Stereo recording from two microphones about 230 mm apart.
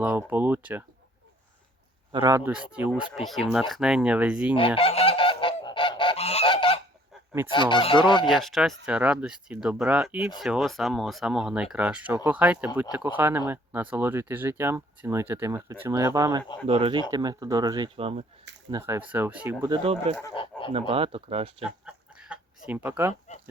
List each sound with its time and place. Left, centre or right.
0.0 s speech: centre
2.1 s speech: centre
4.5 s goose: left
7.1 s goose: centre
7.5 s fowl: left
8.3 s speech: centre
16.6 s speech: right
18.7 s speech: centre
19.8 s speech: right
20.4 s fowl: left
20.9 s speech: right
21.8 s a sound: centre